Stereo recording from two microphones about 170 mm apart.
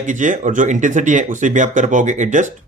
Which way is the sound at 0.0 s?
45° right (ahead or behind).